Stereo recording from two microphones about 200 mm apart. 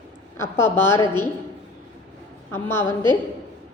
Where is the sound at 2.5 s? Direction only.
10° left (ahead or behind).